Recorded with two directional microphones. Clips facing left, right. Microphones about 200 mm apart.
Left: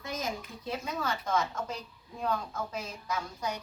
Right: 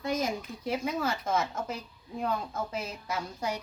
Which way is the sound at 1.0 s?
25° right (ahead or behind).